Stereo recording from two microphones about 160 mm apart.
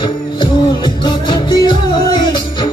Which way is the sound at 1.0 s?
30° left (ahead or behind).